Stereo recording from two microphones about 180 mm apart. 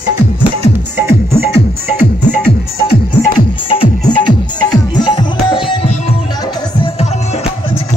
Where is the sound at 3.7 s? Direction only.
30° left (ahead or behind).